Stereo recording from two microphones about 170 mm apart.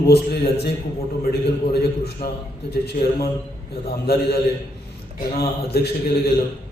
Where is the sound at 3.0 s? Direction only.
55° left (ahead or behind).